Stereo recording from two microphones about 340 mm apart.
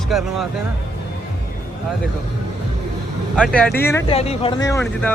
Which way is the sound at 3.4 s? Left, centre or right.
Centre.